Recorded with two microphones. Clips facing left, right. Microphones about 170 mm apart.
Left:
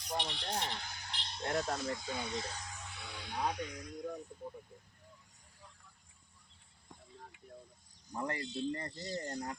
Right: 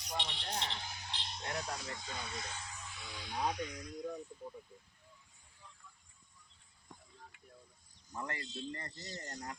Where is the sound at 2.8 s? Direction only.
60° left (ahead or behind).